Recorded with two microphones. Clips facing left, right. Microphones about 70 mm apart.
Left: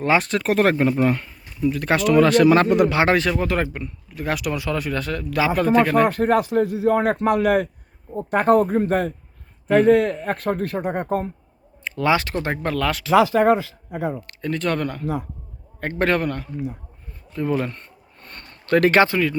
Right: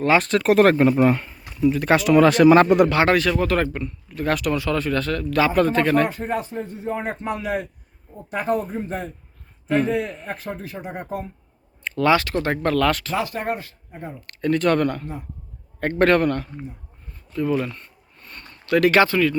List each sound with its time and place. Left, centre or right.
0.2 s speech: centre
0.9 s speech: centre
2.9 s speech: left; by 6.1 s centre
6.1 s a man's voice: left
11.9 s speech: centre
12.5 s speech: centre
13.9 s speech: left
14.2 s speech: centre
15.0 s speech: left
15.8 s speech: centre
17.6 s a sound: left
18.9 s speech: left